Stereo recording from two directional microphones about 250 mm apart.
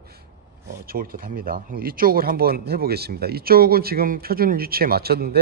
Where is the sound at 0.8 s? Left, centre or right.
Right.